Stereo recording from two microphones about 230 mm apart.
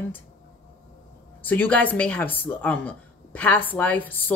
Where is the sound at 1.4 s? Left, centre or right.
Centre.